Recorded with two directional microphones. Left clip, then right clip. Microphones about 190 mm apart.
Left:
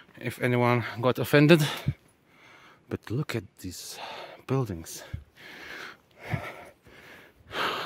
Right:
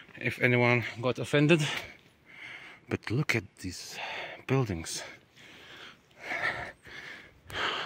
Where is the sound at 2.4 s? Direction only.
Centre (ahead or behind).